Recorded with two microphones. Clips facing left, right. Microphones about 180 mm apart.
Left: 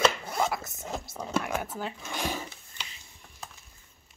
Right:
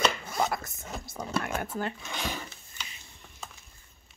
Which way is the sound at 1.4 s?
Centre (ahead or behind).